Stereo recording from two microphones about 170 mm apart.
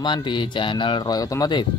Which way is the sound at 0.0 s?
25° left (ahead or behind).